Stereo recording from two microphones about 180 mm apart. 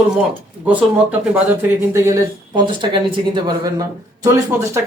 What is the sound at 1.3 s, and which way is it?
Speech, 10° right (ahead or behind).